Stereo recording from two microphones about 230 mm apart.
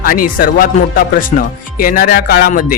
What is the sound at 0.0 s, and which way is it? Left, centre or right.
Speech, left.